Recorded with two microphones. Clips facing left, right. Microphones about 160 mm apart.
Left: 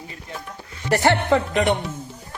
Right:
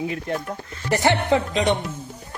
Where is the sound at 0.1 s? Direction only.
70° right (ahead or behind).